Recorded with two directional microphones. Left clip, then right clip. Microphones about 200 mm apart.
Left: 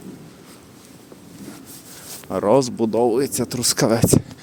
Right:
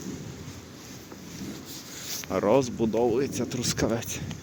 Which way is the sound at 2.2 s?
20° left (ahead or behind).